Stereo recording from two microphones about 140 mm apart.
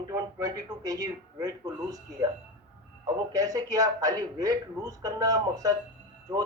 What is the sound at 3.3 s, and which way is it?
A man's voice, 25° right (ahead or behind).